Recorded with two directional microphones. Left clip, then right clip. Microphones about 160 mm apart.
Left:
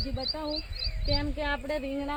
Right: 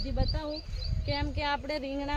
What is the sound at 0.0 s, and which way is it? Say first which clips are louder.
Speech: left 3 dB; 30° right (ahead or behind).